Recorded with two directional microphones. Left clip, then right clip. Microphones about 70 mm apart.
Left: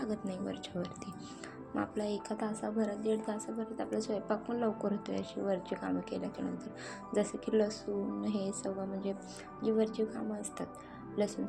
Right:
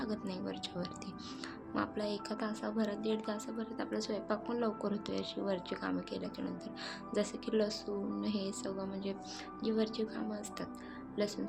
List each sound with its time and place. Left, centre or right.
0.0 s a woman's voice: left
6.1 s a woman's voice: left